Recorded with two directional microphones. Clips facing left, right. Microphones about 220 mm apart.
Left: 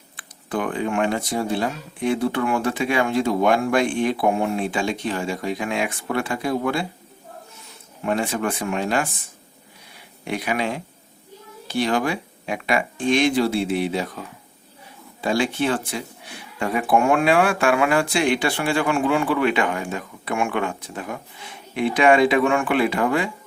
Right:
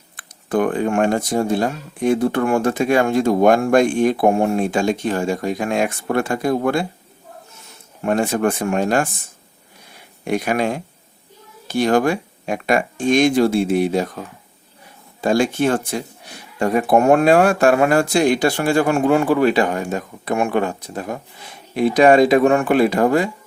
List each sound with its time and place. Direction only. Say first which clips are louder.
0.2 s speech: right 7 dB; 45° right (ahead or behind)
8.0 s speech: right 5 dB; 45° right (ahead or behind)
9.9 s a sound: right 7 dB; 45° right (ahead or behind)
11.7 s speech: right 5 dB; 45° right (ahead or behind)
15.2 s speech: right 5 dB; 45° right (ahead or behind)